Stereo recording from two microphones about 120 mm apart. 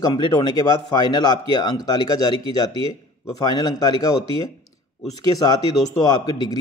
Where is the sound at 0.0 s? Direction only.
35° left (ahead or behind).